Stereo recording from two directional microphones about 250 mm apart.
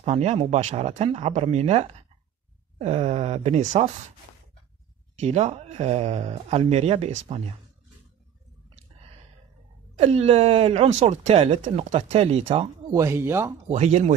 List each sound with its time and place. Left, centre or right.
0.0 s speech: right
5.2 s speech: right
9.9 s speech: right
13.7 s speech: right